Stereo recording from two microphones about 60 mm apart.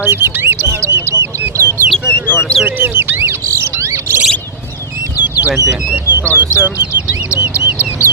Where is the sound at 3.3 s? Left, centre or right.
Right.